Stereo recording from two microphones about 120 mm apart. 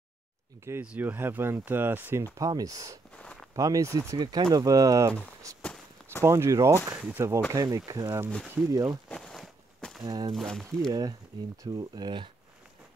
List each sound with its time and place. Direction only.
0.8 s speech: 15° right (ahead or behind)
2.3 s speech: 30° right (ahead or behind)
3.2 s a sound: 10° left (ahead or behind)
3.5 s speech: 30° right (ahead or behind)
5.5 s walk: 30° right (ahead or behind)
6.2 s speech: 25° right (ahead or behind)
7.0 s speech: 10° right (ahead or behind)
7.5 s speech: 30° right (ahead or behind)
9.1 s a sound: 5° left (ahead or behind)
10.0 s speech: 35° right (ahead or behind)
10.3 s speech: 5° left (ahead or behind)
10.9 s speech: 35° right (ahead or behind)